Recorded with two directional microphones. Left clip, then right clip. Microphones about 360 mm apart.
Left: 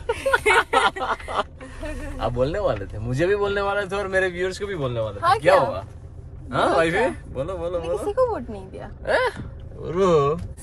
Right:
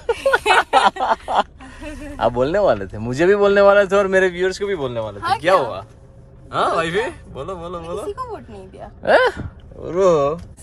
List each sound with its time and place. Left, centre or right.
0.0 s a sound: centre
2.1 s speech: right
9.0 s speech: right